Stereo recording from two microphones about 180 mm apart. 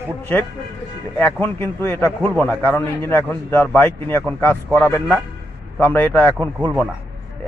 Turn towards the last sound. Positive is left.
turn(degrees=-25)  # may be behind; listen again after turning